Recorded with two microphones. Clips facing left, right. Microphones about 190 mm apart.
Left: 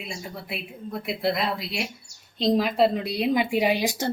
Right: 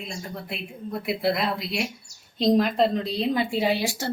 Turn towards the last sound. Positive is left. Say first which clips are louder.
# left 1 dB
turn(degrees=20)  # may be behind; listen again after turning